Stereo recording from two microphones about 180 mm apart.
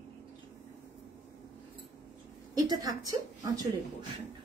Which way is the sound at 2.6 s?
20° right (ahead or behind).